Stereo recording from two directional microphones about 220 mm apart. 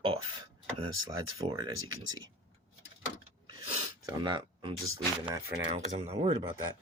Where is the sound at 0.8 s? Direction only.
15° right (ahead or behind).